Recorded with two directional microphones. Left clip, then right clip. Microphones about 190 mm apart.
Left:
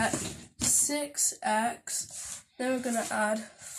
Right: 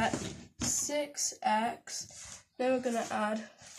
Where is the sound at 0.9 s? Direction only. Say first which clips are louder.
Left 2 dB; 25° right (ahead or behind).